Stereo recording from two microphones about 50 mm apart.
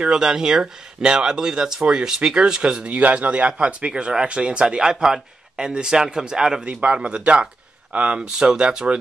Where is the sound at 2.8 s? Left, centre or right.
Right.